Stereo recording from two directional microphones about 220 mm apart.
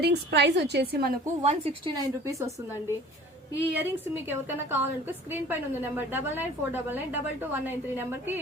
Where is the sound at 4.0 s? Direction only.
10° right (ahead or behind).